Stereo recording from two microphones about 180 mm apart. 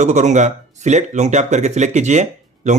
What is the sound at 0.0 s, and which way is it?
Speech, 40° right (ahead or behind).